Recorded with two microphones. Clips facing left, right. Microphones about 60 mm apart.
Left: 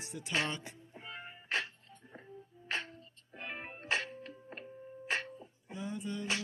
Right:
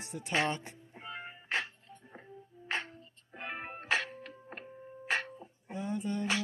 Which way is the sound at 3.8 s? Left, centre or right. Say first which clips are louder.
Right 3 dB; right.